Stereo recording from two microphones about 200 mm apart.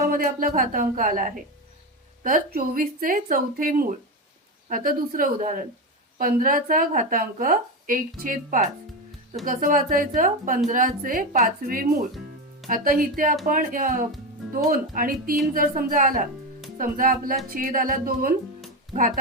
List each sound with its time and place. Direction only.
0.0 s a woman's voice: 45° right (ahead or behind)